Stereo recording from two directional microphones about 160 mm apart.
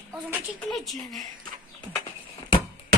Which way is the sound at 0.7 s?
Centre (ahead or behind).